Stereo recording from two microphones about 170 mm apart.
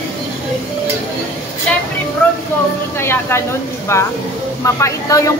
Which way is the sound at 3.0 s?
15° left (ahead or behind).